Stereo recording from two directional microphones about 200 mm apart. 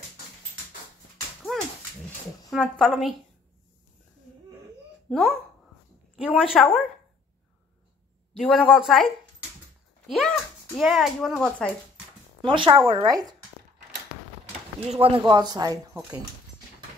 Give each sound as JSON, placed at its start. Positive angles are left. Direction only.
{"t": 1.5, "sound": "dog", "side_deg": 0}
{"t": 2.0, "sound": "speech", "side_deg": 5}
{"t": 5.1, "sound": "a woman's voice", "side_deg": 0}
{"t": 8.4, "sound": "a woman's voice", "side_deg": -5}
{"t": 12.4, "sound": "speech", "side_deg": -25}
{"t": 14.9, "sound": "speech", "side_deg": -30}